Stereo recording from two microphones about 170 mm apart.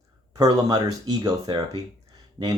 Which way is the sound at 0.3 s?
25° right (ahead or behind).